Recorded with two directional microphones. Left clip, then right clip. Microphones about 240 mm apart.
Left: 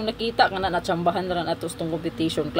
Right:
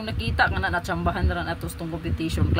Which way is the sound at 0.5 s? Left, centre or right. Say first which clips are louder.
Left 1 dB; right.